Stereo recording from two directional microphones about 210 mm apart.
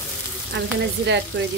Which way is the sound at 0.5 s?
55° right (ahead or behind).